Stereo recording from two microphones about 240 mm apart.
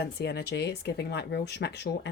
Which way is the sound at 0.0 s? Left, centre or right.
Left.